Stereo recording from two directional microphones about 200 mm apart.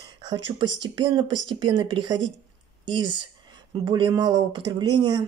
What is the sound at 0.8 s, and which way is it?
Speech, 25° right (ahead or behind).